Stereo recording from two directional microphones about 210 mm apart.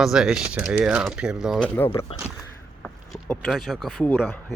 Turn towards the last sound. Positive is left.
turn(degrees=10)  # may be behind; listen again after turning